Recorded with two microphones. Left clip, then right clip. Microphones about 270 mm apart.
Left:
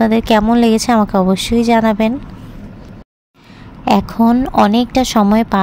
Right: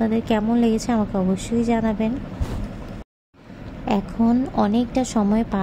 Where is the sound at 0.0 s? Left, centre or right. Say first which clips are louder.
Left 10 dB; left.